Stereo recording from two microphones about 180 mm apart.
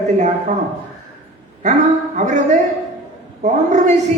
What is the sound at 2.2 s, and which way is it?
Speech, 45° right (ahead or behind).